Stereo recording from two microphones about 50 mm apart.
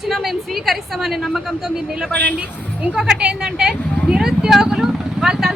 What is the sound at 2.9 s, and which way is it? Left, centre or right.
Speech, centre.